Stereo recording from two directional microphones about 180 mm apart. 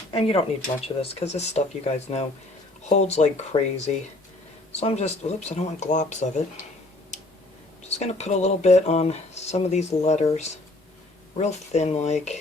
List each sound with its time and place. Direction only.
0.1 s speech: 30° left (ahead or behind)
7.9 s speech: 40° left (ahead or behind)